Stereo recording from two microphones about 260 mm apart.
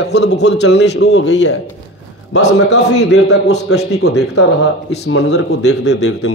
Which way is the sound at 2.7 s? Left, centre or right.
Left.